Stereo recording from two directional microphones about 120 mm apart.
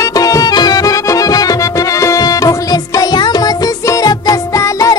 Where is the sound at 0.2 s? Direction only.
30° left (ahead or behind).